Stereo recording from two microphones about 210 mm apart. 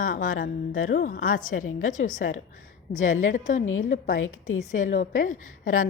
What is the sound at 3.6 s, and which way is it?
A woman's voice, 70° left (ahead or behind).